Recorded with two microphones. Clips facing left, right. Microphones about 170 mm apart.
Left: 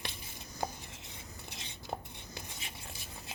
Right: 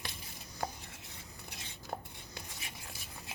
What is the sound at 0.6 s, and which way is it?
Chopping, 20° left (ahead or behind).